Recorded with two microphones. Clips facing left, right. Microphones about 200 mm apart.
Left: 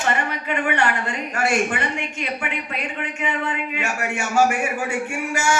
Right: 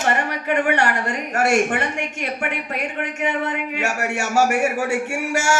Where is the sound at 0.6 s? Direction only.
75° right (ahead or behind).